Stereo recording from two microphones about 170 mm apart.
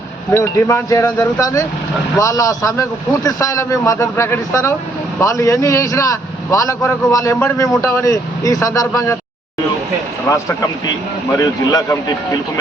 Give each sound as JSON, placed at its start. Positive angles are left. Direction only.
{"t": 0.3, "sound": "a man's voice", "side_deg": 15}
{"t": 10.2, "sound": "a man's voice", "side_deg": 20}